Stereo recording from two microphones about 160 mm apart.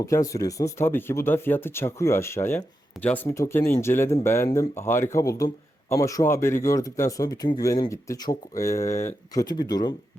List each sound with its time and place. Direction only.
0.0 s speech: 20° left (ahead or behind)